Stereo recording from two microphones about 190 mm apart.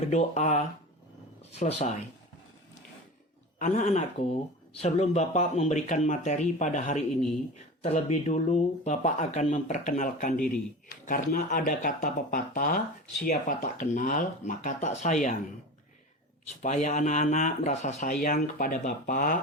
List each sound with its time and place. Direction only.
0.1 s speech: 35° left (ahead or behind)
3.6 s speech: 40° left (ahead or behind)
16.6 s speech: 40° left (ahead or behind)